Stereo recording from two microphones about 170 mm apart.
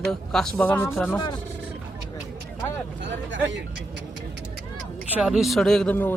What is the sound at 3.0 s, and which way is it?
Speech, 90° right.